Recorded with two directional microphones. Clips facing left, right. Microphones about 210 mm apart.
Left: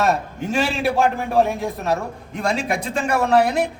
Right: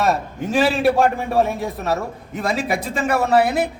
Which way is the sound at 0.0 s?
Centre (ahead or behind).